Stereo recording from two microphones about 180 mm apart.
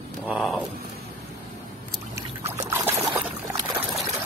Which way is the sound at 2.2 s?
15° right (ahead or behind).